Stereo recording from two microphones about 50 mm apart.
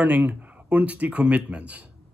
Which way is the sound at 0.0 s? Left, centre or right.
Right.